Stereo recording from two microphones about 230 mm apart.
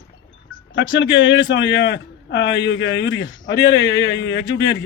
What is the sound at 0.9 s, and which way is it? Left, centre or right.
A man's voice, left.